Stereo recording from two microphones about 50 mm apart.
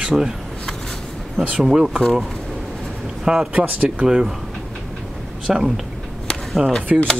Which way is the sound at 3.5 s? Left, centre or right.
Right.